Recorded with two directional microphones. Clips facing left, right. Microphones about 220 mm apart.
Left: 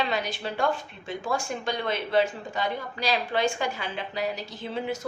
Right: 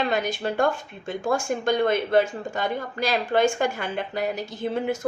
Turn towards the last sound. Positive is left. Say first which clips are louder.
# right 5 dB
turn(degrees=-50)  # may be behind; listen again after turning